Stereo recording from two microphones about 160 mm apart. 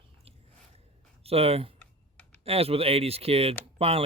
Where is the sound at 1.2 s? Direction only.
40° right (ahead or behind).